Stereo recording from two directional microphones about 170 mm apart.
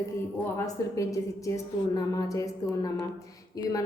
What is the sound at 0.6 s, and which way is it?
A woman's voice, 20° left (ahead or behind).